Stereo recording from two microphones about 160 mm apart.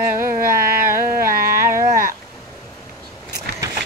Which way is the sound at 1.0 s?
65° right (ahead or behind).